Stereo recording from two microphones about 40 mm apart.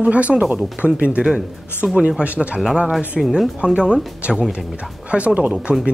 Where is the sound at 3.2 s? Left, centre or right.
Centre.